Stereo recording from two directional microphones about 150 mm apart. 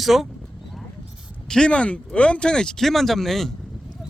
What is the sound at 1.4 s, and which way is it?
Speech, 5° left (ahead or behind).